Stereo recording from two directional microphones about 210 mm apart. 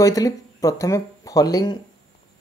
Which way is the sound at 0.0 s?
15° left (ahead or behind).